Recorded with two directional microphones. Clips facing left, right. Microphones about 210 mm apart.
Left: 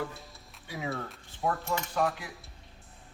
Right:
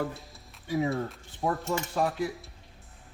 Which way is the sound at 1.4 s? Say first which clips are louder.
Right 2 dB; 35° right (ahead or behind).